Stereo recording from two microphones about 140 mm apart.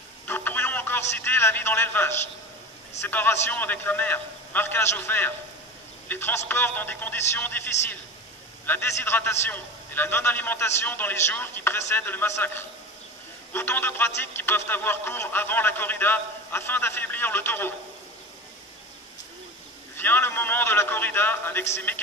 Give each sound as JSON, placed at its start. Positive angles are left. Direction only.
{"t": 0.3, "sound": "a sound", "side_deg": 15}
{"t": 3.0, "sound": "a man's voice", "side_deg": 15}
{"t": 20.0, "sound": "a man's voice", "side_deg": 15}